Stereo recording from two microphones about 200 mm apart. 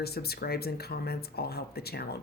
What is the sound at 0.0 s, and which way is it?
Speech, 50° left (ahead or behind).